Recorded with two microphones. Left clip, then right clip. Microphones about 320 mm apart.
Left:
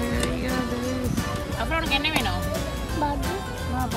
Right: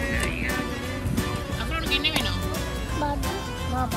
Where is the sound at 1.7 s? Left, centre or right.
Centre.